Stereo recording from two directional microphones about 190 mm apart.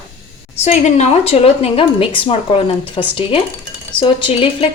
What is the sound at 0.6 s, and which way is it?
A woman's voice, 35° left (ahead or behind).